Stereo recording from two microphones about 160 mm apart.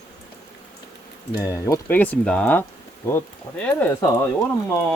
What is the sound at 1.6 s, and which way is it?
Speech, 20° left (ahead or behind).